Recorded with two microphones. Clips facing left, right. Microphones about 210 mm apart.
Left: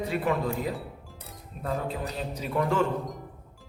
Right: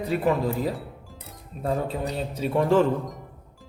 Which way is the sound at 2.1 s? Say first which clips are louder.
Right 5 dB; 30° right (ahead or behind).